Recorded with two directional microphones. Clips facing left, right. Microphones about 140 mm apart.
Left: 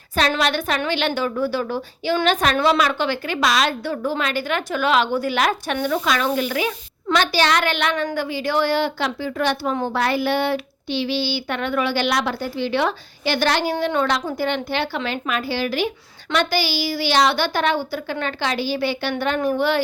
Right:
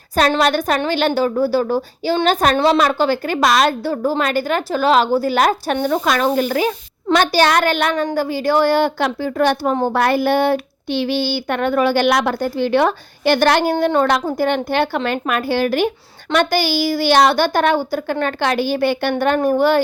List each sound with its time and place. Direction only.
0.2 s a woman's voice: 45° right (ahead or behind)